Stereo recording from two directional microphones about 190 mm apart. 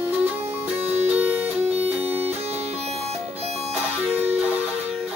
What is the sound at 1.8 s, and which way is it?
Music, 30° right (ahead or behind).